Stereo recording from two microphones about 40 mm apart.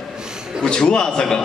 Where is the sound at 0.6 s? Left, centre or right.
Left.